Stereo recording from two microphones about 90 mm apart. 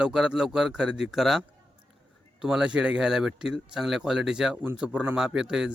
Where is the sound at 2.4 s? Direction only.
10° right (ahead or behind).